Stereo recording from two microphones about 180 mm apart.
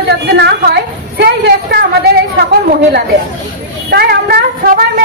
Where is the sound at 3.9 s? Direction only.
65° right (ahead or behind).